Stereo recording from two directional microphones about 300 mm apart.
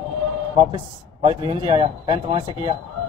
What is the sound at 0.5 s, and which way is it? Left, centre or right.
A man's voice, centre.